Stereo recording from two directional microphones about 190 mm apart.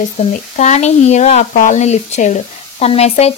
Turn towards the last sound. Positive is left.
turn(degrees=35)  # may be behind; listen again after turning